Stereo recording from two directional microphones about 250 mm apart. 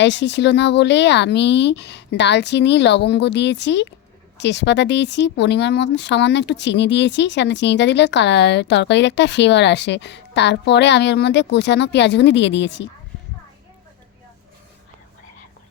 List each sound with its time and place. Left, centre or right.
0.0 s speech: left